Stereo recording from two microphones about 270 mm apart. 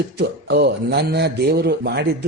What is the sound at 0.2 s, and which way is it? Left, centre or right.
Speech, right.